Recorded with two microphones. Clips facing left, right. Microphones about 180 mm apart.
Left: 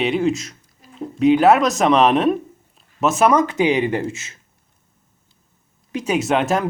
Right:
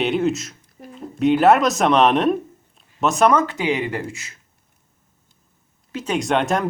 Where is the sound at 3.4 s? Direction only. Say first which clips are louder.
Left 4 dB; 20° left (ahead or behind).